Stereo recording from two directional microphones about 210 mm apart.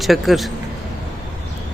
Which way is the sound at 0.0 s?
Centre (ahead or behind).